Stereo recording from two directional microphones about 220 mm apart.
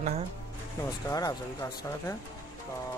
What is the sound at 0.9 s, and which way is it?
Speech, 15° left (ahead or behind).